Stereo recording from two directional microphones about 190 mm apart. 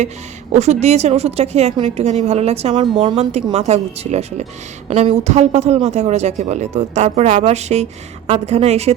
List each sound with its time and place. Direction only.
0.5 s a woman's voice: 35° right (ahead or behind)